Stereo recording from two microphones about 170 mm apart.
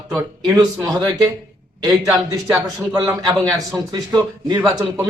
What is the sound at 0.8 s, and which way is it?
A man's voice, 20° right (ahead or behind).